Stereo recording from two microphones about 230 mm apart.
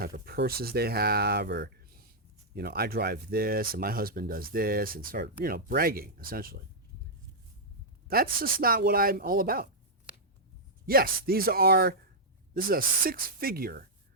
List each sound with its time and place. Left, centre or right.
0.0 s speech: right
8.0 s speech: right
10.8 s speech: right